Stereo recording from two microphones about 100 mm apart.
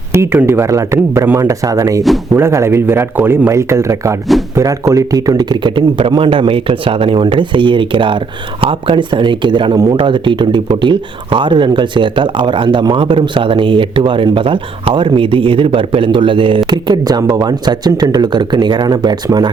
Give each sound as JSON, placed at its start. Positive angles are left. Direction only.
{"t": 0.1, "sound": "speech", "side_deg": -25}
{"t": 9.7, "sound": "speech", "side_deg": -40}
{"t": 10.0, "sound": "speech", "side_deg": -55}
{"t": 16.6, "sound": "speech", "side_deg": -45}